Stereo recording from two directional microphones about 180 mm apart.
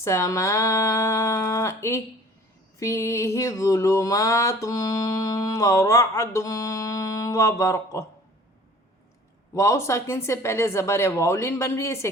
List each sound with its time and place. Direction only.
0.0 s music: 15° left (ahead or behind)
9.6 s music: 15° left (ahead or behind)